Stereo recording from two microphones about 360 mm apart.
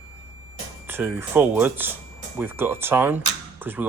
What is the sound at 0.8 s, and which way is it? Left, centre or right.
Speech, centre.